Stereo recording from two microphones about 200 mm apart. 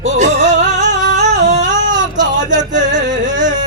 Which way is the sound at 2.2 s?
40° right (ahead or behind).